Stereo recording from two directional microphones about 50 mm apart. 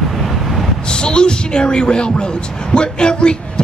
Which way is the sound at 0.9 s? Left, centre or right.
Centre.